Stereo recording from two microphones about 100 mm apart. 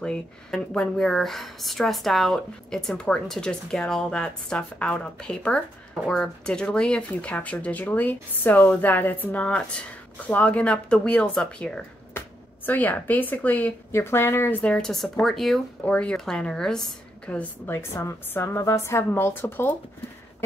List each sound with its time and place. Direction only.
0.0 s speech: 5° left (ahead or behind); by 14.6 s 25° left (ahead or behind)
14.6 s speech: 10° left (ahead or behind)
15.8 s a woman's voice: 15° left (ahead or behind)
17.6 s a woman's voice: 30° left (ahead or behind)